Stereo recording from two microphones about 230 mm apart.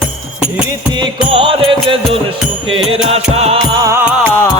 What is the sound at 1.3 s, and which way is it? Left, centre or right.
Music, right.